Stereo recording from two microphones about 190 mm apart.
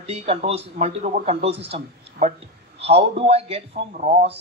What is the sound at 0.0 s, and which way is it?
Speech, 35° right (ahead or behind).